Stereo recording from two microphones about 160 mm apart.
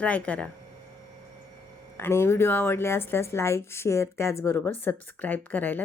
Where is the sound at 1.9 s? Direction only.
15° left (ahead or behind).